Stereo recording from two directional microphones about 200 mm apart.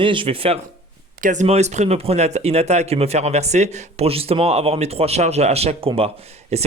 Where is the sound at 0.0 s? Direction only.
25° right (ahead or behind).